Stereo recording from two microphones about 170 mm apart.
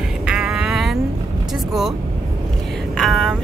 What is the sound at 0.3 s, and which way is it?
Music, 5° right (ahead or behind).